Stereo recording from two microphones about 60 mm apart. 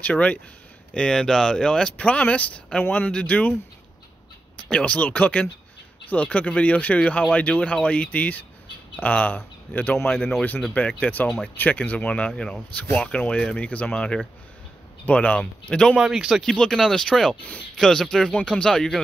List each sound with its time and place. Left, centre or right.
0.0 s speech: left
0.9 s speech: centre
4.6 s speech: left
10.7 s speech: centre
11.2 s speech: centre
11.5 s speech: left; by 16.0 s centre
16.0 s speech: centre
16.4 s speech: centre